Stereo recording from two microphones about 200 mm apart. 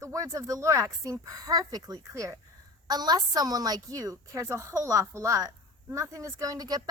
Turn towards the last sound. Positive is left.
turn(degrees=-20)  # may be behind; listen again after turning